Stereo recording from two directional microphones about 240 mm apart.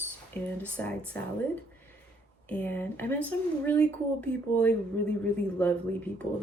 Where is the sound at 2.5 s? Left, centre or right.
Centre.